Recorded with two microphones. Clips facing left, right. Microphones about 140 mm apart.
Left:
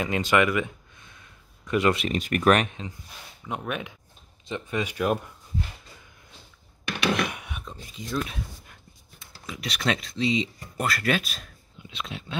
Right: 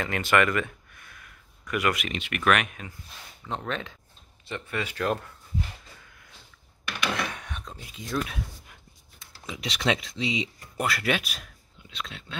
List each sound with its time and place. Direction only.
0.0 s speech: 15° left (ahead or behind)
3.4 s speech: 10° left (ahead or behind)
7.2 s a sound: 10° left (ahead or behind)
7.7 s speech: 5° right (ahead or behind)
9.5 s speech: 20° right (ahead or behind)
12.0 s speech: 10° left (ahead or behind)